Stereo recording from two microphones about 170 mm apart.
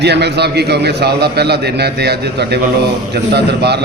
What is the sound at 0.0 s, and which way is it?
A man's voice, 80° right.